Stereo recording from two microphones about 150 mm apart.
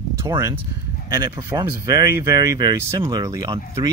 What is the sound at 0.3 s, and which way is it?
Speech, 20° right (ahead or behind).